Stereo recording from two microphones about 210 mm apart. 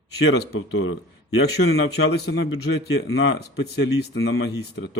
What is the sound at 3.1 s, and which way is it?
Speech, 70° left (ahead or behind).